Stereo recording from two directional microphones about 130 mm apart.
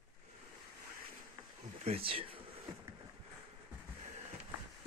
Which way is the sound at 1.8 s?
50° right (ahead or behind).